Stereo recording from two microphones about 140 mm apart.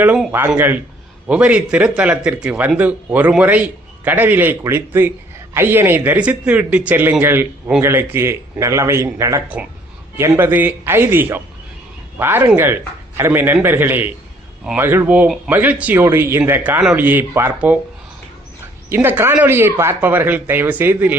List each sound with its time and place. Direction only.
0.0 s speech: 10° right (ahead or behind)
18.9 s speech: 15° right (ahead or behind)